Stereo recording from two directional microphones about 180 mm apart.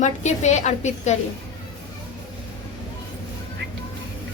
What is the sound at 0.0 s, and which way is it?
A woman's voice, 40° left (ahead or behind).